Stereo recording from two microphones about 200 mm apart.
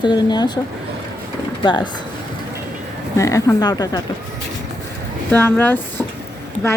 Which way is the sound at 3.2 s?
15° left (ahead or behind).